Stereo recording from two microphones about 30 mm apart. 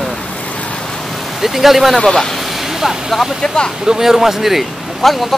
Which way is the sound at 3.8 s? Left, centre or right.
Centre.